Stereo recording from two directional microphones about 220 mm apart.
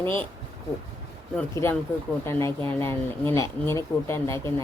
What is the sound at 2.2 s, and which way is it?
Speech, 10° left (ahead or behind).